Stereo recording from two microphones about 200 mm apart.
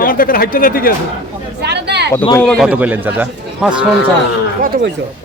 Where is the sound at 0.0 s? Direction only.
45° left (ahead or behind).